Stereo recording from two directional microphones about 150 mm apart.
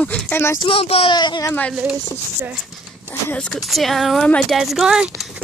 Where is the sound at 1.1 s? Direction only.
30° left (ahead or behind).